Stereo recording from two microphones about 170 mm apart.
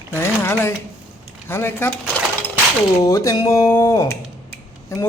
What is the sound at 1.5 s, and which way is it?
Speech, 15° left (ahead or behind).